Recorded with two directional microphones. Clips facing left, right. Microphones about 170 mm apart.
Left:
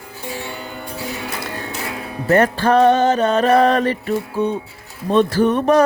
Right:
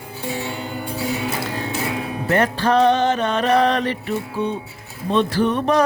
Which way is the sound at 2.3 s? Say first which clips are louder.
Left 4 dB; 50° left (ahead or behind).